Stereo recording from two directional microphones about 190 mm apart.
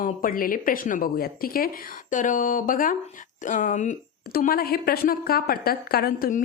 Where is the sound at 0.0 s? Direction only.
45° left (ahead or behind).